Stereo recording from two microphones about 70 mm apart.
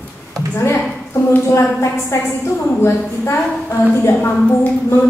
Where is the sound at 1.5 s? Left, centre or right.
Left.